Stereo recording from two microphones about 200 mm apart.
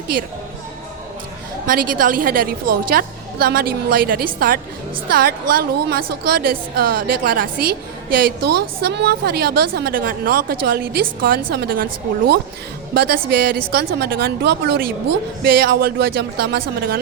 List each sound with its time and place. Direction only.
1.6 s a woman's voice: 45° right (ahead or behind)
12.9 s a woman's voice: 50° right (ahead or behind)